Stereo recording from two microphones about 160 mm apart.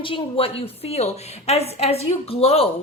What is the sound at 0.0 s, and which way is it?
A woman's voice, 35° left (ahead or behind).